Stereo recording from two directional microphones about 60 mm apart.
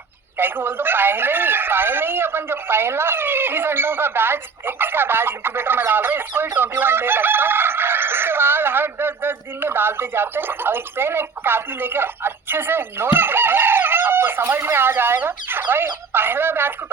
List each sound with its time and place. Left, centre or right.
0.3 s speech: right